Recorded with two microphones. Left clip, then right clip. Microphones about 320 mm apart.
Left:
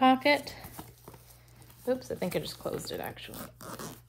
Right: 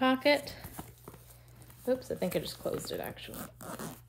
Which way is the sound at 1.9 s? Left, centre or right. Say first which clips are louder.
Even; centre.